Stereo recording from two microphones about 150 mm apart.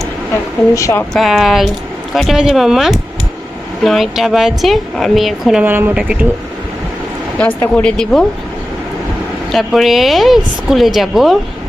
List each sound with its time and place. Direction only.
0.7 s speech: 20° left (ahead or behind)
1.1 s a woman's voice: centre (ahead or behind)
5.6 s speech: 15° right (ahead or behind)
7.3 s speech: 10° left (ahead or behind)
9.5 s a woman's voice: centre (ahead or behind)